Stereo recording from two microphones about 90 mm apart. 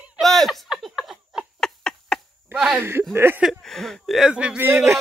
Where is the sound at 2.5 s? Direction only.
10° right (ahead or behind).